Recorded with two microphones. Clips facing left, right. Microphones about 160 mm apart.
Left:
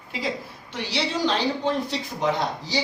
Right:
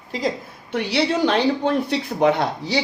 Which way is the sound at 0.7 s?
60° right (ahead or behind).